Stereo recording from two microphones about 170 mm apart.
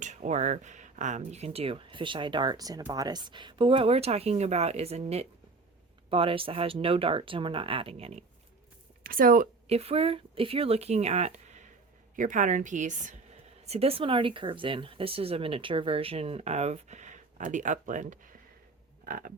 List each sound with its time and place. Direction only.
0.0 s speech: 45° right (ahead or behind)
9.0 s a woman's voice: 55° right (ahead or behind)
9.6 s a woman's voice: 35° right (ahead or behind)
13.7 s speech: 35° right (ahead or behind)
19.0 s frog: 60° right (ahead or behind)